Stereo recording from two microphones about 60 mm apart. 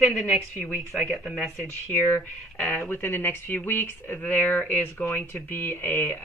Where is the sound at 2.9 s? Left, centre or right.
Left.